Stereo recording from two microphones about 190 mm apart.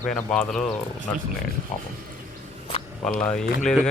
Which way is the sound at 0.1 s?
5° left (ahead or behind).